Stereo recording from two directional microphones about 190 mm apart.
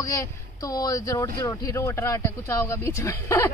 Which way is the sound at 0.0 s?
15° left (ahead or behind).